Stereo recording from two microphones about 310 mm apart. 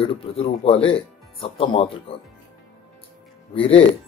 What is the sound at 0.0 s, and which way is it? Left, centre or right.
Speech, centre.